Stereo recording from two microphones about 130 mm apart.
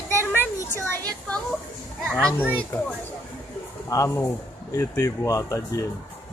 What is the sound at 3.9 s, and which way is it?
Speech, 25° left (ahead or behind).